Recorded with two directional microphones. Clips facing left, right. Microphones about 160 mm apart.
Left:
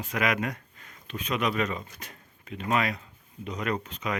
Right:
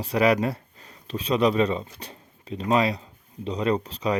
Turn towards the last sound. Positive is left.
turn(degrees=-35)  # may be behind; listen again after turning